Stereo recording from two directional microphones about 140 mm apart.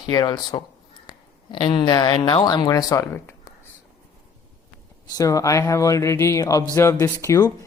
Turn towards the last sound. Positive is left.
turn(degrees=20)  # may be behind; listen again after turning